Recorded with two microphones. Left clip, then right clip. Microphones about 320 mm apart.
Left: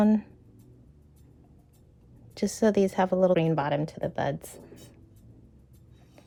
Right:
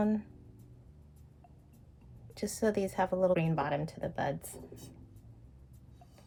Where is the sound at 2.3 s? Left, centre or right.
Left.